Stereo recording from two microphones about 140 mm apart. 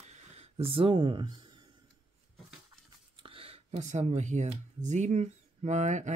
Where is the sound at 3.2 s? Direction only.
40° right (ahead or behind).